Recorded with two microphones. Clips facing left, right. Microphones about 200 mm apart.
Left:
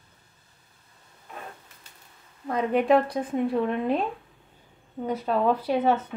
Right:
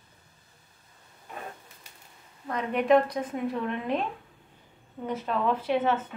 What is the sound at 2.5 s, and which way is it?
A woman's voice, 30° left (ahead or behind).